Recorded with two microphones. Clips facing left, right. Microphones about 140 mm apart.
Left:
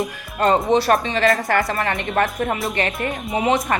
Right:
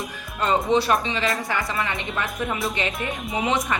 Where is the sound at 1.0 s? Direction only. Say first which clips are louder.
Left 7 dB; 50° left (ahead or behind).